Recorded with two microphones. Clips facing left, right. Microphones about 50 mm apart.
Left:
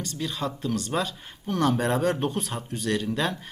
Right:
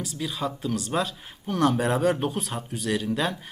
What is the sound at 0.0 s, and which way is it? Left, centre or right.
Speech, centre.